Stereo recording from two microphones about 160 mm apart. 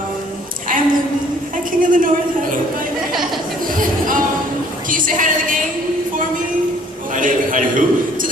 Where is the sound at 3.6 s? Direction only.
55° right (ahead or behind).